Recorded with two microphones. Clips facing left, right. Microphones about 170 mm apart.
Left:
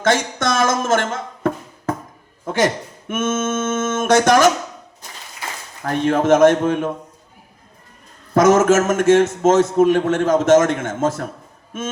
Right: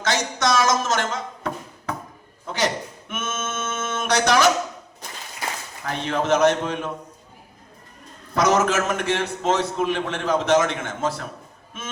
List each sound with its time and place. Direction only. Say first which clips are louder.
0.0 s a sound: left 5 dB; 50° left (ahead or behind)
3.1 s a man's voice: left 10 dB; 50° left (ahead or behind)
6.1 s a man's voice: left 6 dB; 50° left (ahead or behind)
8.4 s a man's voice: left 7 dB; 50° left (ahead or behind)